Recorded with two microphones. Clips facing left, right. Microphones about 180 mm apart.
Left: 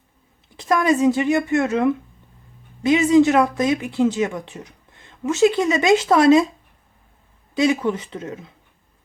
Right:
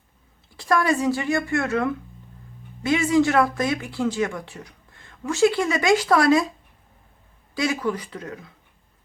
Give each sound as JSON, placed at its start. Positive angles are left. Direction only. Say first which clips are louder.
{"t": 0.5, "sound": "speech", "louder": "left 3 dB", "side_deg": 20}
{"t": 7.5, "sound": "speech", "louder": "left 5 dB", "side_deg": 20}